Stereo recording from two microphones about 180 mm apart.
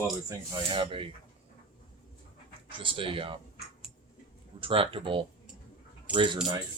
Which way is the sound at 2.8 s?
30° right (ahead or behind).